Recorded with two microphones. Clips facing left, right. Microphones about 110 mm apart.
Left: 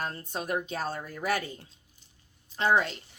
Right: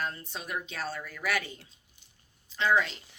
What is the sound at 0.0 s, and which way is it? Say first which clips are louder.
A woman's voice: left 2 dB; 45° left (ahead or behind).